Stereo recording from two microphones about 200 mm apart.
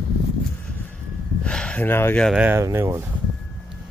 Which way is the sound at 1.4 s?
5° left (ahead or behind).